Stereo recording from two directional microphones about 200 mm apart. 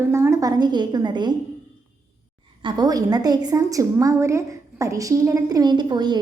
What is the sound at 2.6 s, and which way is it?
A woman's voice, 20° right (ahead or behind).